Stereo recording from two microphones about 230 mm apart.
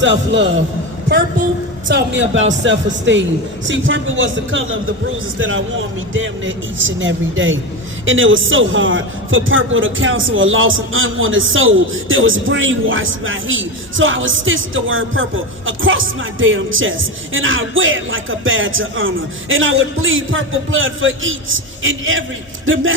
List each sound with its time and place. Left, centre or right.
0.0 s speech: right
1.0 s a woman's voice: right
1.9 s a man's voice: right